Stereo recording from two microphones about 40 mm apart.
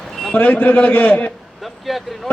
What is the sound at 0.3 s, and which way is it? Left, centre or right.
A man's voice, left.